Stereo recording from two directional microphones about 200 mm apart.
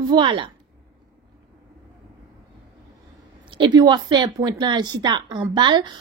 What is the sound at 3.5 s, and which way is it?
A woman's voice, 20° right (ahead or behind).